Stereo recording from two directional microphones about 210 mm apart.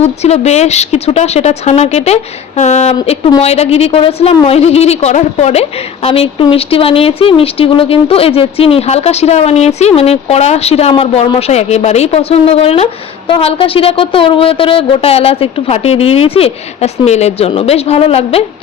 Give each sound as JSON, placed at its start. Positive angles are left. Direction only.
{"t": 0.0, "sound": "a woman's voice", "side_deg": 30}